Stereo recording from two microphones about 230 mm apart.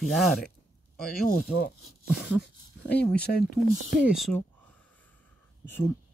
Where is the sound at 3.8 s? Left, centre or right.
Centre.